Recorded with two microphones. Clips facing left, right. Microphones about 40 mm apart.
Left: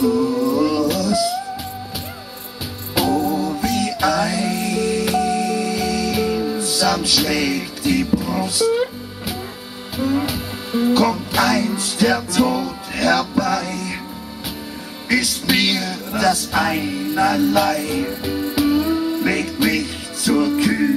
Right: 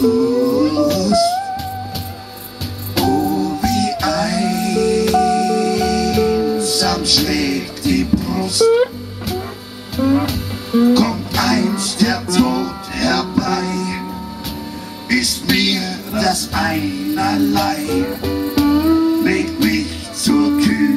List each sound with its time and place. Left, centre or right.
0.0 s music: centre
2.9 s music: centre
3.3 s music: left
6.1 s music: centre
9.9 s music: centre
10.2 s music: centre
15.0 s music: centre